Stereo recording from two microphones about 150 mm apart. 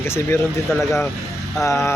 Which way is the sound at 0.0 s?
15° left (ahead or behind).